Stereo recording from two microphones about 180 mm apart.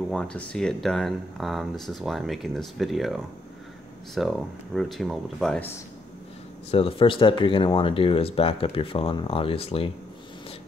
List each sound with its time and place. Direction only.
0.1 s speech: 5° left (ahead or behind)
6.7 s speech: 30° left (ahead or behind)